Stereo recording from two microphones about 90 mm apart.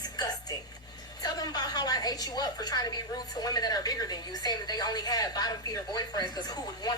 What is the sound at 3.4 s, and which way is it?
A woman's voice, 45° left (ahead or behind).